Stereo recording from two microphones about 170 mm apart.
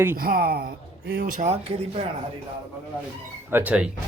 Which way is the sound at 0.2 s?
60° right (ahead or behind).